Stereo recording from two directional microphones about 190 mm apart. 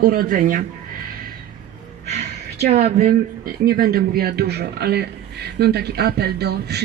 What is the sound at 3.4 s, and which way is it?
A man's voice, 50° right (ahead or behind).